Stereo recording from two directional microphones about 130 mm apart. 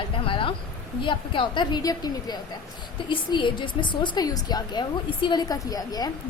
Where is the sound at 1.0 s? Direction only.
40° left (ahead or behind).